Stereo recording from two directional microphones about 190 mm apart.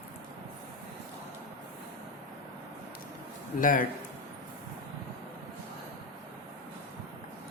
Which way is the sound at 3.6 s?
45° left (ahead or behind).